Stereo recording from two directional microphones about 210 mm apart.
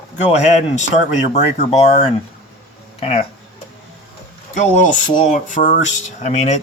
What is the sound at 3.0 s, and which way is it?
Speech, 25° left (ahead or behind).